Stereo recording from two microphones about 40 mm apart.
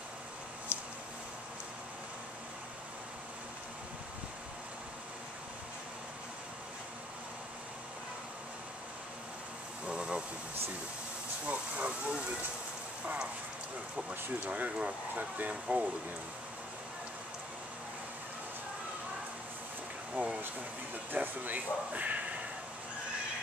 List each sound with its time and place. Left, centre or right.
9.8 s a sound: right
11.4 s speech: right
20.2 s speech: right